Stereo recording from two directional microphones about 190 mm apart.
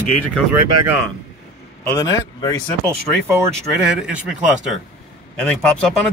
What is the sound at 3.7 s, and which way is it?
Speech, 5° right (ahead or behind).